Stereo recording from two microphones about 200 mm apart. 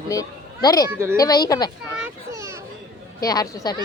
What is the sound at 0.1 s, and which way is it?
Speech, 15° left (ahead or behind).